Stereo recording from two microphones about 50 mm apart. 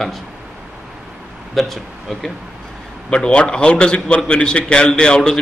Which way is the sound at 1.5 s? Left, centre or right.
Centre.